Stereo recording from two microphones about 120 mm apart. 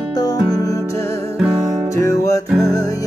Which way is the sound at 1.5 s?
30° right (ahead or behind).